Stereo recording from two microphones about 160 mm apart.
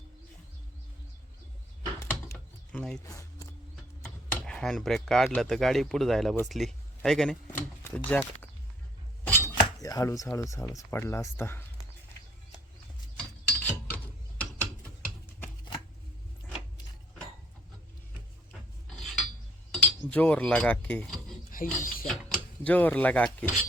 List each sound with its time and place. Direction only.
2.7 s speech: 5° left (ahead or behind)
3.1 s speech: 20° left (ahead or behind)
4.0 s speech: 5° left (ahead or behind)
9.2 s speech: 20° left (ahead or behind)
13.1 s mechanisms: 10° left (ahead or behind)
19.7 s speech: 10° left (ahead or behind)
21.5 s speech: 60° left (ahead or behind)
22.0 s cutlery: 5° left (ahead or behind)